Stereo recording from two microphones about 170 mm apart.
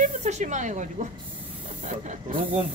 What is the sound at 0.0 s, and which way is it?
Speech, 45° right (ahead or behind).